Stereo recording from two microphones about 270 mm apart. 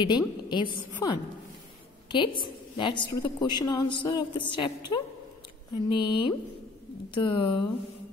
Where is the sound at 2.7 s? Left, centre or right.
Centre.